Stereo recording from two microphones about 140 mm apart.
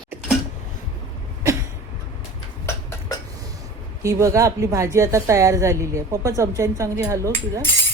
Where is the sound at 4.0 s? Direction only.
20° right (ahead or behind).